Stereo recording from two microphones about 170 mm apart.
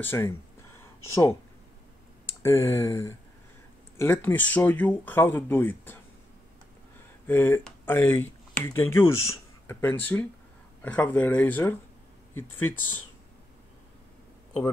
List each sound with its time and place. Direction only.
0.0 s speech: 15° left (ahead or behind)
2.4 s speech: 15° left (ahead or behind)
7.2 s speech: 10° left (ahead or behind)